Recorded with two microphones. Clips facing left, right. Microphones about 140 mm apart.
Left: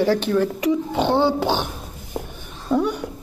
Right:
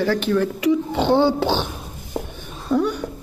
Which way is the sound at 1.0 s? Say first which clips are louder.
Right 1 dB; centre (ahead or behind).